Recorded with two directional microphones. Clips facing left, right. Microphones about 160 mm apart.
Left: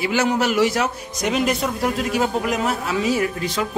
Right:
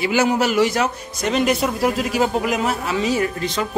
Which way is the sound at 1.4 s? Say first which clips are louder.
Right 3 dB; 5° right (ahead or behind).